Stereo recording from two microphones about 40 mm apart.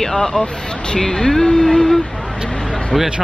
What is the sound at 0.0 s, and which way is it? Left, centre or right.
Speech, centre.